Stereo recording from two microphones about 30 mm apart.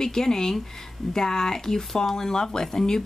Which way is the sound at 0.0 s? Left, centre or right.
Centre.